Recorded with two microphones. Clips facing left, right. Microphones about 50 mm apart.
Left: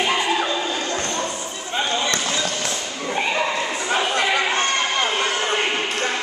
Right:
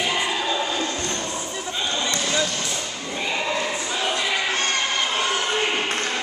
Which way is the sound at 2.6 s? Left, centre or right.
Left.